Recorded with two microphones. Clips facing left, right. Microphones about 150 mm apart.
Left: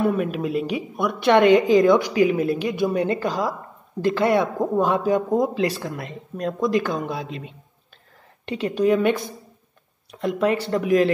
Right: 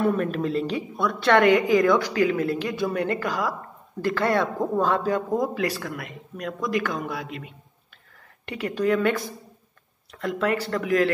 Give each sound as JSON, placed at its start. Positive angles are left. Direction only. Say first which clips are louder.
{"t": 0.0, "sound": "a woman's voice", "louder": "left 1 dB", "side_deg": 5}